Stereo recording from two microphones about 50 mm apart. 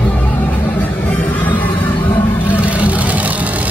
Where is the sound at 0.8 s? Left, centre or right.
Left.